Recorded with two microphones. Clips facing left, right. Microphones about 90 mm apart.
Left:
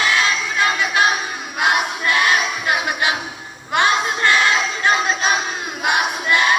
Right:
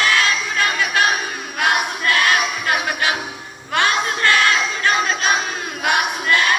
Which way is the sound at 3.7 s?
20° left (ahead or behind).